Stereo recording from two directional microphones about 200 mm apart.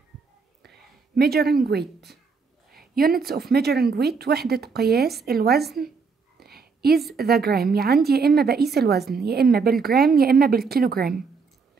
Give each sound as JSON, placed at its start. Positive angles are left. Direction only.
{"t": 1.1, "sound": "speech", "side_deg": -50}
{"t": 6.4, "sound": "a sound", "side_deg": -50}
{"t": 7.2, "sound": "speech", "side_deg": -50}